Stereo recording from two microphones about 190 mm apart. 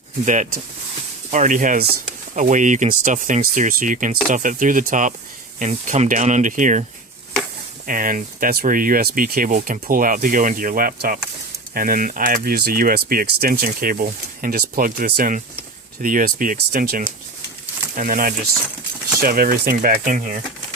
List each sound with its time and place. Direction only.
0.3 s speech: 40° right (ahead or behind)
7.9 s speech: 45° right (ahead or behind)